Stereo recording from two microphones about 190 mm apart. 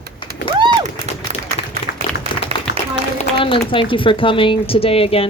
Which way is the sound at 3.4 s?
25° left (ahead or behind).